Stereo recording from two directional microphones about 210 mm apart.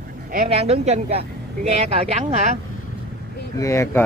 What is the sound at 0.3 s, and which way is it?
Speech, 35° right (ahead or behind).